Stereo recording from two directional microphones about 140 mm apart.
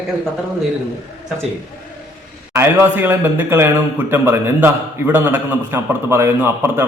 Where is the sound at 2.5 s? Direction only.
15° right (ahead or behind).